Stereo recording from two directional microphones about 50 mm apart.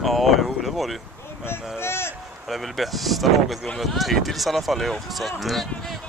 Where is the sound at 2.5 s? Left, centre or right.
Centre.